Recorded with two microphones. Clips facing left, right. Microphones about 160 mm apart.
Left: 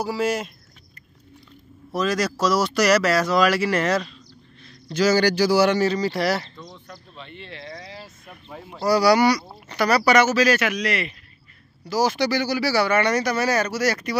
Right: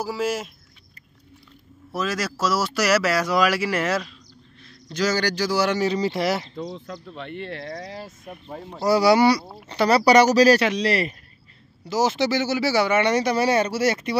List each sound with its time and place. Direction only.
0.0 s speech: centre (ahead or behind)
2.0 s a man's voice: 5° right (ahead or behind)
5.9 s speech: 20° right (ahead or behind)
6.5 s speech: 75° right (ahead or behind); by 8.1 s 50° right (ahead or behind)
8.8 s speech: 25° right (ahead or behind)
11.8 s speech: 20° right (ahead or behind)